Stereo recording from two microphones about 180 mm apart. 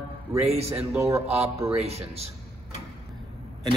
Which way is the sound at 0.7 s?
10° right (ahead or behind).